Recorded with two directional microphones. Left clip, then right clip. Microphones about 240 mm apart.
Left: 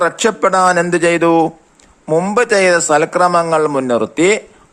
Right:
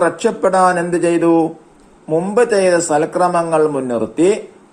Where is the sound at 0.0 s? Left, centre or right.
Left.